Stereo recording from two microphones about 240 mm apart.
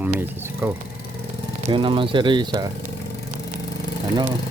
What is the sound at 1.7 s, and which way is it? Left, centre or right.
Speech, right.